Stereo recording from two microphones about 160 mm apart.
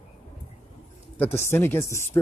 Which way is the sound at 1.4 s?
15° left (ahead or behind).